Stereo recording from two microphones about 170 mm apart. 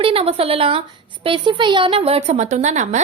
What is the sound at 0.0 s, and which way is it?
A woman's voice, 35° right (ahead or behind).